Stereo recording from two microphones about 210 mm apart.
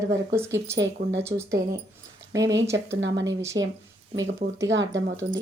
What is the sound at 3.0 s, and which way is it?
Speech, 60° right (ahead or behind).